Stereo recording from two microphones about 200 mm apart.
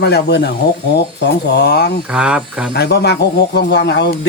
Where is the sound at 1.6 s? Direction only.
55° left (ahead or behind).